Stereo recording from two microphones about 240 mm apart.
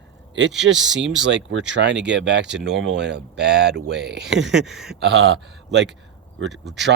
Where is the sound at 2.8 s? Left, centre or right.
Right.